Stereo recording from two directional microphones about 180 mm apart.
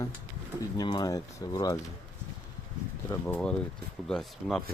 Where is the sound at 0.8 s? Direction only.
20° left (ahead or behind).